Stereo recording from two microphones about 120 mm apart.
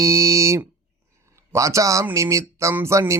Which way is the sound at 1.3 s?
25° right (ahead or behind).